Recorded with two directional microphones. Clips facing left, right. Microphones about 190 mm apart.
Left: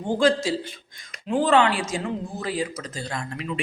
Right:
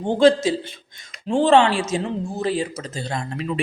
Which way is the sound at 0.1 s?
25° right (ahead or behind).